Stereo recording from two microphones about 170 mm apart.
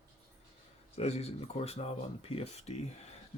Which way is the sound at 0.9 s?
40° left (ahead or behind).